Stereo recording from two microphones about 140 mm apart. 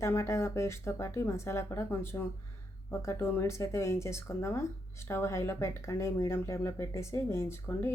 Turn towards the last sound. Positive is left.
turn(degrees=20)  # may be behind; listen again after turning